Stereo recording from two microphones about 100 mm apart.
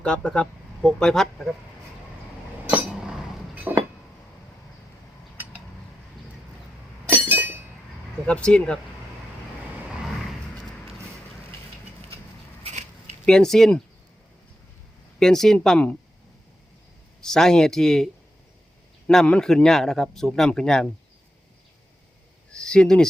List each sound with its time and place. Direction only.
0.0 s speech: 10° left (ahead or behind)
3.5 s a sound: 15° right (ahead or behind)
7.1 s glass: 20° right (ahead or behind)
8.3 s speech: 10° left (ahead or behind)
13.2 s speech: 5° left (ahead or behind)
15.2 s speech: 5° left (ahead or behind)
17.2 s speech: 5° left (ahead or behind)
22.5 s speech: 10° left (ahead or behind)